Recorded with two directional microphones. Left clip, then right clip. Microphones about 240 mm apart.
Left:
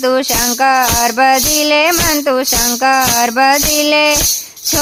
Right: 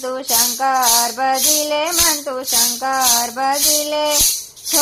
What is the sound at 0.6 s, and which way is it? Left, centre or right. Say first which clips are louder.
Music: left 5 dB; left.